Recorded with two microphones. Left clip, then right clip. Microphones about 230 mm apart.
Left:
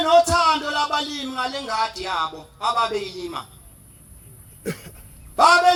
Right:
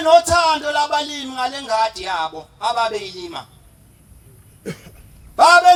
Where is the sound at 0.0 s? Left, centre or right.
Centre.